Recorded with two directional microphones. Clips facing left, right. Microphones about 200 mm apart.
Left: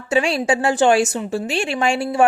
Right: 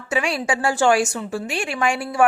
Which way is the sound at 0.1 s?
30° left (ahead or behind).